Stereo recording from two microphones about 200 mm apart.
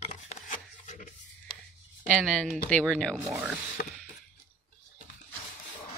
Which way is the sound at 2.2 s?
Centre (ahead or behind).